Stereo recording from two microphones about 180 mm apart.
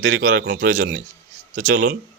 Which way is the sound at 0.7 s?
45° right (ahead or behind).